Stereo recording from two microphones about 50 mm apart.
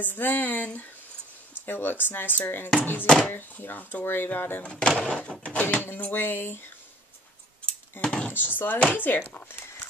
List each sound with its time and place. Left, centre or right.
0.0 s speech: left
1.7 s speech: left
4.6 s speech: left
5.4 s speech: left
8.0 s speech: centre
8.3 s speech: left